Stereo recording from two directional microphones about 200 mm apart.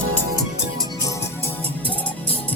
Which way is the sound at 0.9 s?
15° left (ahead or behind).